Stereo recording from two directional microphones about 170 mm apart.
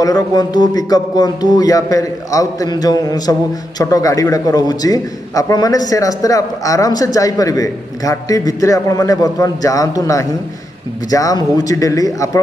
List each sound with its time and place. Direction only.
0.0 s speech: 20° left (ahead or behind)